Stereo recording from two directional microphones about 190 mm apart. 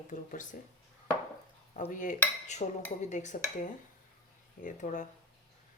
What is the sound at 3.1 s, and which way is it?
Speech, 40° left (ahead or behind).